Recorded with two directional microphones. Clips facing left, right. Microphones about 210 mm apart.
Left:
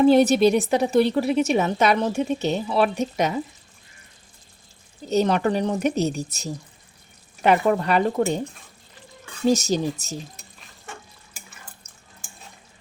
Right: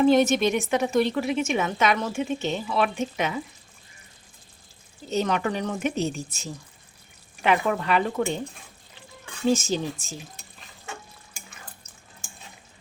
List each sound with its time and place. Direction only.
0.0 s a woman's voice: 35° left (ahead or behind)
5.0 s a woman's voice: 35° left (ahead or behind)
9.5 s a woman's voice: 40° left (ahead or behind)